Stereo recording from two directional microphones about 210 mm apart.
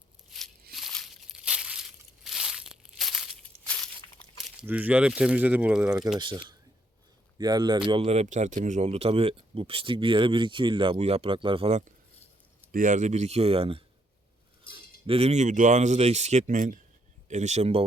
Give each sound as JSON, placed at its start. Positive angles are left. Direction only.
{"t": 0.3, "sound": "a sound", "side_deg": 0}
{"t": 0.7, "sound": "crushing", "side_deg": 0}
{"t": 4.2, "sound": "crumpling", "side_deg": 5}
{"t": 4.6, "sound": "speech", "side_deg": -5}
{"t": 6.1, "sound": "speech", "side_deg": -20}